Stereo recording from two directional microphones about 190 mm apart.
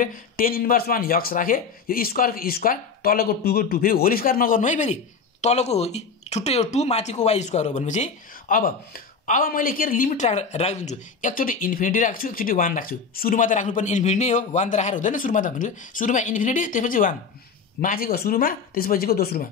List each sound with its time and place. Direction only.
0.0 s speech: 50° left (ahead or behind)